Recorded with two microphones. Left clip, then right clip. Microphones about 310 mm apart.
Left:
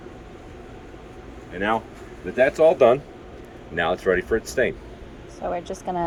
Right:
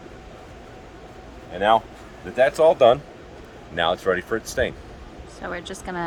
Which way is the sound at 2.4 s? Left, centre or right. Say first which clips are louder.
Right 1 dB; centre.